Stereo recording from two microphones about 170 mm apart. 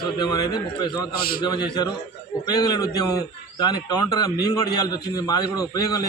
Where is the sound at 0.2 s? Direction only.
25° left (ahead or behind).